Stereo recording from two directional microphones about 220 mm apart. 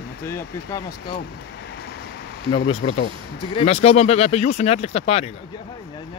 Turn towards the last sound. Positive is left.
turn(degrees=25)  # may be behind; listen again after turning